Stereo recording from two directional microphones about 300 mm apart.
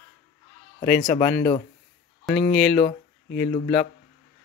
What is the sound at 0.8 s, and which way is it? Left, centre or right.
Speech, centre.